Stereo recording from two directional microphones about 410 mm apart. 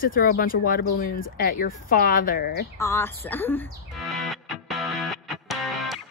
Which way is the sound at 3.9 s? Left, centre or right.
Centre.